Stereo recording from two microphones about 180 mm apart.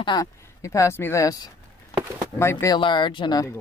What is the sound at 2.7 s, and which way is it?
Speech, 25° left (ahead or behind).